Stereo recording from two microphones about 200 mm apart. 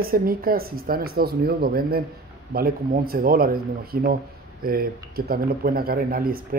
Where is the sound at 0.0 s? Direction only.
45° right (ahead or behind).